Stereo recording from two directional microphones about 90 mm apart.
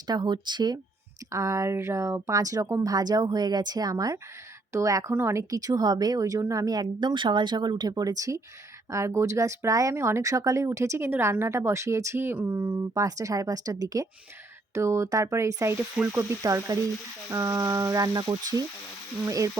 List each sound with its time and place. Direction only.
0.1 s speech: 55° right (ahead or behind)
1.3 s speech: 35° right (ahead or behind)
14.7 s speech: 30° right (ahead or behind); by 18.3 s 50° right (ahead or behind)